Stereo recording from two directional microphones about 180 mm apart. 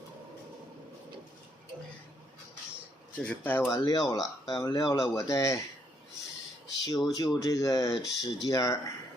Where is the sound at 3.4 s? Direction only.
15° left (ahead or behind).